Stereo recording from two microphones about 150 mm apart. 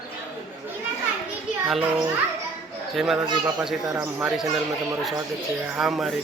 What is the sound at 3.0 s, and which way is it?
A man's voice, 5° right (ahead or behind).